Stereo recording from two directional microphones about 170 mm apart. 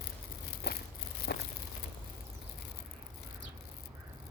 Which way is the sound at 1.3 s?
75° left (ahead or behind).